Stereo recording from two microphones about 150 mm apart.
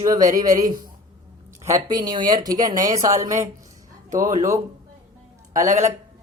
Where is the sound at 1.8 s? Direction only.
30° right (ahead or behind).